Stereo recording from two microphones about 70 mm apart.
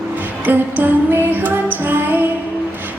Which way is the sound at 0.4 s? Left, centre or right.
Right.